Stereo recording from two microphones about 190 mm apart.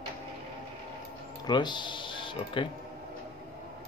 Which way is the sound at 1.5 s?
25° left (ahead or behind).